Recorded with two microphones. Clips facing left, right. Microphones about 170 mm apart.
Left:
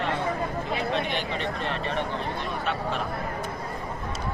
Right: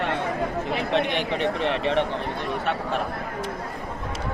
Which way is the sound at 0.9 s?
70° right (ahead or behind).